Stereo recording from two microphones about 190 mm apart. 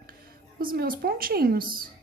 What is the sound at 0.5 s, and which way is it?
Speech, 50° right (ahead or behind).